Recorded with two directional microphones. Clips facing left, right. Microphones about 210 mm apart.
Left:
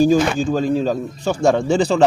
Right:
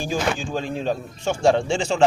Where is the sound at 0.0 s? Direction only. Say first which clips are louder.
Left 10 dB; 40° left (ahead or behind).